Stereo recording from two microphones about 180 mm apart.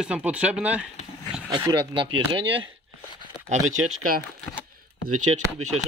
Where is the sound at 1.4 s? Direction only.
25° right (ahead or behind).